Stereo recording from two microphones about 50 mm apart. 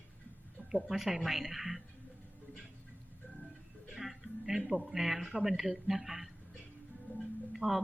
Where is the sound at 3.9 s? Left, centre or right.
Centre.